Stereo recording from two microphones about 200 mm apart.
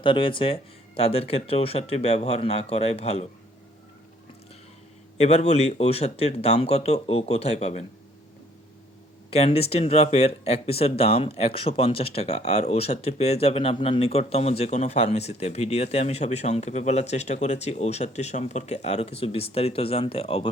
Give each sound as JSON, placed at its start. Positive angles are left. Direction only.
{"t": 0.0, "sound": "speech", "side_deg": 25}
{"t": 5.1, "sound": "speech", "side_deg": 30}
{"t": 9.3, "sound": "speech", "side_deg": 30}